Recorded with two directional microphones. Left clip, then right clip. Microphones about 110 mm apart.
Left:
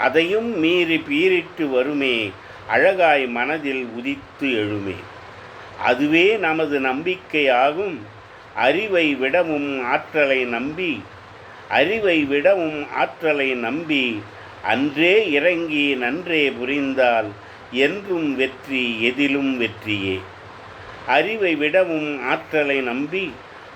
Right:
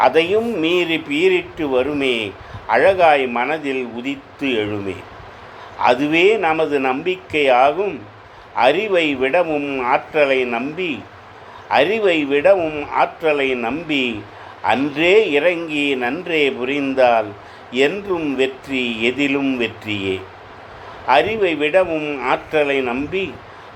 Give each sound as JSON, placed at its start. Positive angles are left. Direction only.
{"t": 0.0, "sound": "speech", "side_deg": -25}
{"t": 18.4, "sound": "speech", "side_deg": -35}